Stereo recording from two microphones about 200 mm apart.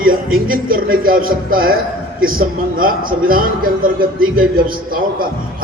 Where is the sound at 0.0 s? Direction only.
45° right (ahead or behind).